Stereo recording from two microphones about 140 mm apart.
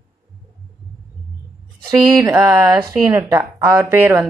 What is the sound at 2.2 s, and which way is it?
A woman's voice, 15° right (ahead or behind).